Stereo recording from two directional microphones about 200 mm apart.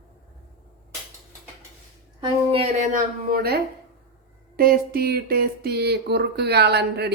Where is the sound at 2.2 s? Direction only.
25° right (ahead or behind).